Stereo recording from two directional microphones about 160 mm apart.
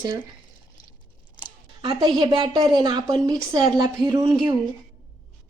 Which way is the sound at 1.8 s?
30° right (ahead or behind).